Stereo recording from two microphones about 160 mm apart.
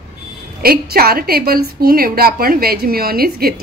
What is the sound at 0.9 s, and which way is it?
A woman's voice, 70° right (ahead or behind).